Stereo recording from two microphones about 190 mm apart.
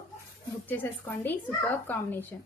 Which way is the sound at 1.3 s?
10° left (ahead or behind).